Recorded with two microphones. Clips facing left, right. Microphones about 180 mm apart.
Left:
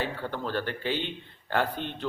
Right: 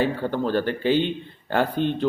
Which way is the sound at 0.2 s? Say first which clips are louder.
Right 8 dB; 25° right (ahead or behind).